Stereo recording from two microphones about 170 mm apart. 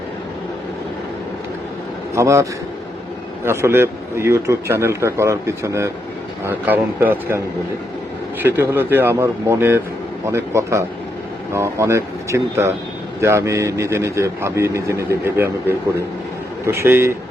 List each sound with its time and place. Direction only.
2.1 s a man's voice: 15° right (ahead or behind)
16.6 s a man's voice: 15° right (ahead or behind)